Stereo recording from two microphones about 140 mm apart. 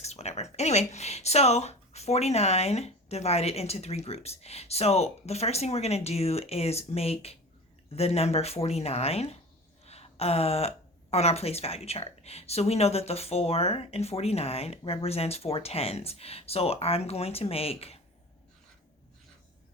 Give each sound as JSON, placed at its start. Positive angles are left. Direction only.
{"t": 0.0, "sound": "speech", "side_deg": 50}